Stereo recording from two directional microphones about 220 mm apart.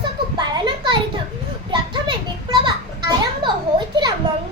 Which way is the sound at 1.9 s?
20° right (ahead or behind).